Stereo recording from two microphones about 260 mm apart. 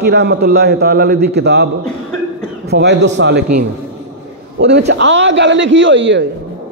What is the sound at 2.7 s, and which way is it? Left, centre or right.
A man's voice, right.